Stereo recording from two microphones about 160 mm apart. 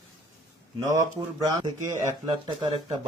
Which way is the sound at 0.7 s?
25° right (ahead or behind).